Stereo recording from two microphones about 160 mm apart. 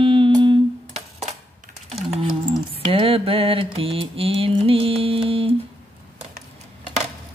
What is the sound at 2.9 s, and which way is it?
Mantra, 35° right (ahead or behind).